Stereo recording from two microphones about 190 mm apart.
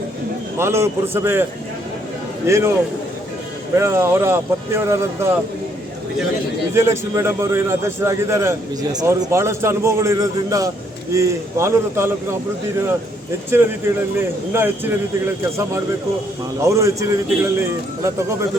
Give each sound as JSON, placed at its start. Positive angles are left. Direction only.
{"t": 0.6, "sound": "a man's voice", "side_deg": -15}
{"t": 2.5, "sound": "a man's voice", "side_deg": -15}
{"t": 3.8, "sound": "a man's voice", "side_deg": -15}
{"t": 6.7, "sound": "a man's voice", "side_deg": -15}
{"t": 14.2, "sound": "a man's voice", "side_deg": -10}
{"t": 16.6, "sound": "a man's voice", "side_deg": -15}